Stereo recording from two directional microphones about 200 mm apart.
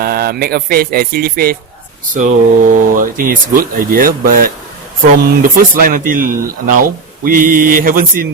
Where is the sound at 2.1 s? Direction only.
40° right (ahead or behind).